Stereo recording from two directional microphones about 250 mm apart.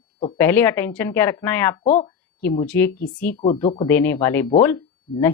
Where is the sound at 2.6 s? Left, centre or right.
Centre.